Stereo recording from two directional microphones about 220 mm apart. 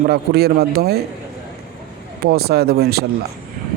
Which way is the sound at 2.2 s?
45° right (ahead or behind).